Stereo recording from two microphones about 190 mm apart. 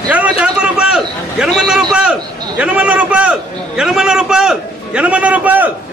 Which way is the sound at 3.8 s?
5° right (ahead or behind).